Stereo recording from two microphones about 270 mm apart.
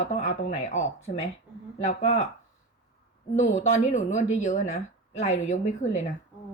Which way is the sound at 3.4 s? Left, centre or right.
Left.